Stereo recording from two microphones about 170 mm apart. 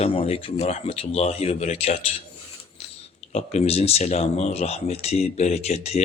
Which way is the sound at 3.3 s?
40° left (ahead or behind).